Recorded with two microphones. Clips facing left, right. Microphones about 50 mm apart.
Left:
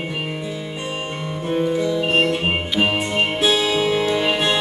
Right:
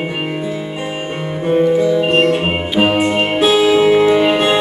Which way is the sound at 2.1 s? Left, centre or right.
Centre.